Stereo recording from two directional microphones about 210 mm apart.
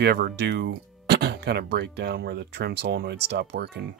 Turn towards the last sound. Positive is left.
turn(degrees=-55)  # may be behind; listen again after turning